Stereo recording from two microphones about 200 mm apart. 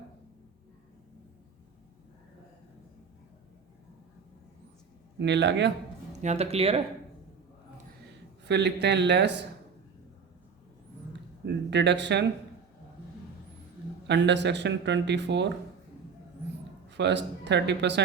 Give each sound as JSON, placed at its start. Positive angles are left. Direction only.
{"t": 5.2, "sound": "speech", "side_deg": -60}
{"t": 6.1, "sound": "speech", "side_deg": -35}
{"t": 8.4, "sound": "speech", "side_deg": -60}
{"t": 11.4, "sound": "speech", "side_deg": -60}
{"t": 14.1, "sound": "speech", "side_deg": -60}
{"t": 16.9, "sound": "speech", "side_deg": -60}